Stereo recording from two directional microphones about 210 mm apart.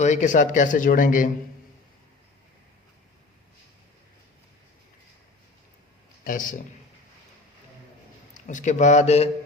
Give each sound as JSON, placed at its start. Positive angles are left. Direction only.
{"t": 0.0, "sound": "speech", "side_deg": 35}
{"t": 6.2, "sound": "speech", "side_deg": 40}
{"t": 8.3, "sound": "a man's voice", "side_deg": 35}